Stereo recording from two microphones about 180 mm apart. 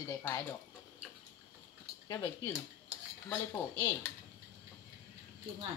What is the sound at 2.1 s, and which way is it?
Speech, 20° left (ahead or behind).